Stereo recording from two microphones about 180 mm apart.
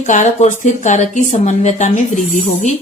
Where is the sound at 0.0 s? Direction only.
45° left (ahead or behind).